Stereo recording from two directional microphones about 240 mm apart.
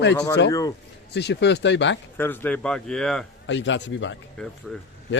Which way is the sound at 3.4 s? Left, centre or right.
Left.